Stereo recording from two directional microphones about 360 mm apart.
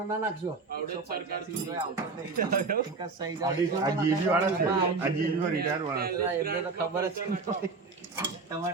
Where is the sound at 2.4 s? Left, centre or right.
Right.